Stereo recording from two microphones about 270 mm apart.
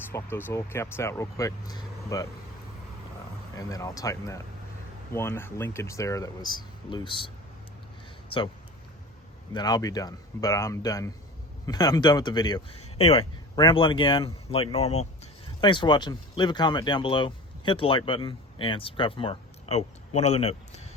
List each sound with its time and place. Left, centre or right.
0.1 s speech: centre
3.6 s speech: centre
9.5 s a man's voice: centre